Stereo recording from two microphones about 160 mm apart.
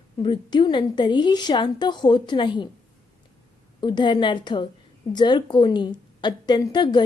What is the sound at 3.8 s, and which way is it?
A woman's voice, 30° left (ahead or behind).